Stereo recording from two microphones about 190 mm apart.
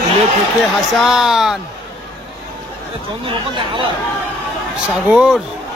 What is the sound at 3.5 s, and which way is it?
Speech, 25° right (ahead or behind).